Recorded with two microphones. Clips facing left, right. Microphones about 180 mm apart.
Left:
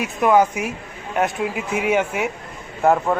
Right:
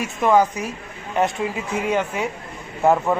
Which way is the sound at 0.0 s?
5° left (ahead or behind).